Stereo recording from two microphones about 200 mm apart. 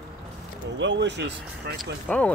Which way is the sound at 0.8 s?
60° right (ahead or behind).